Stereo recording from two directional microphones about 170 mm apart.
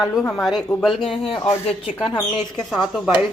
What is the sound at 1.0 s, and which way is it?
Speech, 30° left (ahead or behind).